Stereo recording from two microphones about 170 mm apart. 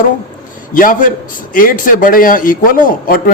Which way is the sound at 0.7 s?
50° left (ahead or behind).